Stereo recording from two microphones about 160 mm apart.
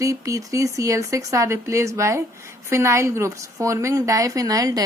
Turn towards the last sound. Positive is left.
turn(degrees=-20)  # may be behind; listen again after turning